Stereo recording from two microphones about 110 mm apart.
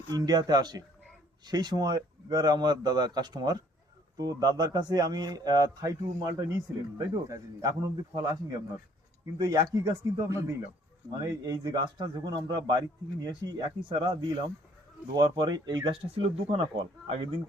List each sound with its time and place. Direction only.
0.1 s a man's voice: 35° right (ahead or behind)
16.1 s speech: 60° right (ahead or behind)